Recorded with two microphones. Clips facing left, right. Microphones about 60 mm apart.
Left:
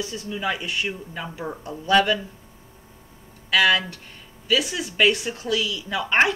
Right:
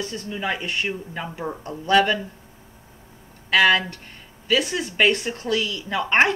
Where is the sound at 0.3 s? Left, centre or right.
Centre.